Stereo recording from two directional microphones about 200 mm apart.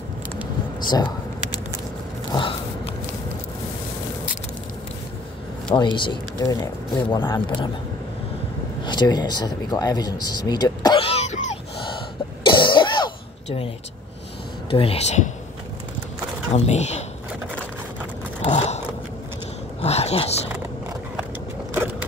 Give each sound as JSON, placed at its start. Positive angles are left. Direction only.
{"t": 0.9, "sound": "a sound", "side_deg": 20}
{"t": 5.8, "sound": "speech", "side_deg": 20}
{"t": 8.8, "sound": "speech", "side_deg": 20}
{"t": 12.4, "sound": "throat clearing", "side_deg": 25}
{"t": 14.7, "sound": "speech", "side_deg": 30}
{"t": 16.5, "sound": "speech", "side_deg": 35}
{"t": 18.4, "sound": "biting", "side_deg": 35}
{"t": 19.8, "sound": "a sound", "side_deg": 30}